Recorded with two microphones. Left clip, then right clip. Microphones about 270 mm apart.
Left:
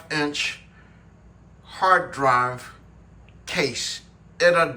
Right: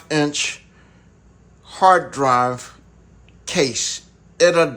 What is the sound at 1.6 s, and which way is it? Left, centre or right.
Speech, centre.